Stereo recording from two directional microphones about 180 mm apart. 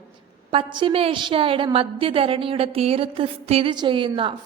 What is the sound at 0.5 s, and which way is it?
A woman's voice, 25° right (ahead or behind).